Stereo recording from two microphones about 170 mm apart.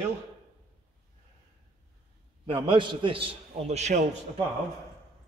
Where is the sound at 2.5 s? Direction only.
30° right (ahead or behind).